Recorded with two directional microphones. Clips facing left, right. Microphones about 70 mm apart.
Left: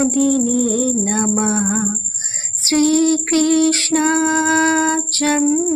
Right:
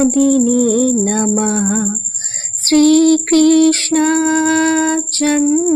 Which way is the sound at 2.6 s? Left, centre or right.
Right.